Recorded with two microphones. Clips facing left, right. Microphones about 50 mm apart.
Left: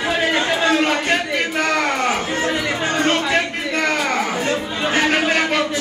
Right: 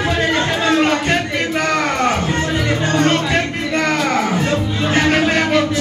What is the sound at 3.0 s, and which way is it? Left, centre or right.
Music, centre.